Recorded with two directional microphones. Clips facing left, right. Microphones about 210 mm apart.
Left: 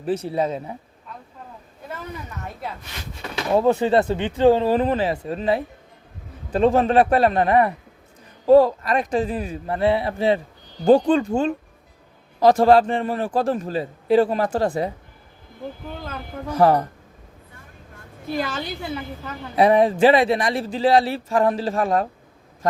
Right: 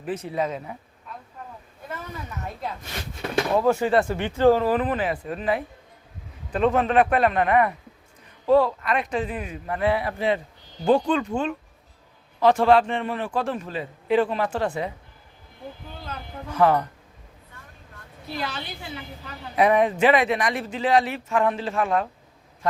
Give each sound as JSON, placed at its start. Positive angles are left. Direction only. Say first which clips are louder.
{"t": 0.0, "sound": "a man's voice", "louder": "left 4 dB", "side_deg": 35}
{"t": 3.5, "sound": "a man's voice", "louder": "left 4 dB", "side_deg": 25}
{"t": 16.0, "sound": "a man's voice", "louder": "left 4 dB", "side_deg": 45}
{"t": 18.3, "sound": "a woman's voice", "louder": "left 6 dB", "side_deg": 45}
{"t": 19.5, "sound": "a man's voice", "louder": "left 3 dB", "side_deg": 30}